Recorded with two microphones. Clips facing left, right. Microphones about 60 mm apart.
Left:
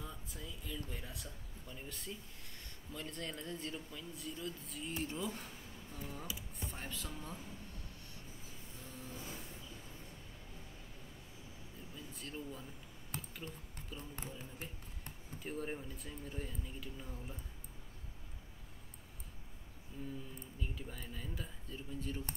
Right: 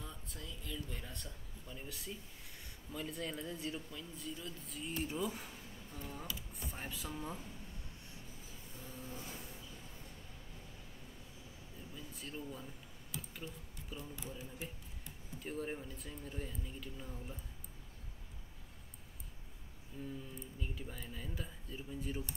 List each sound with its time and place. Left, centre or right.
0.0 s speech: centre
8.8 s vehicle: centre
11.9 s air conditioning: centre
13.1 s clicking: left
13.9 s speech: left
14.4 s a sound: left
15.4 s speech: centre
20.0 s speech: centre